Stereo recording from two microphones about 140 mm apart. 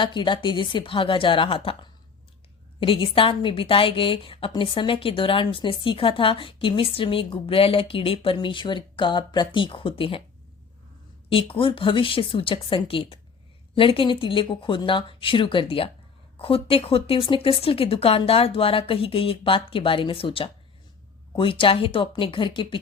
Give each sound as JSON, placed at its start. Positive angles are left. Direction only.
{"t": 0.0, "sound": "a woman's voice", "side_deg": 35}
{"t": 11.3, "sound": "a woman's voice", "side_deg": 40}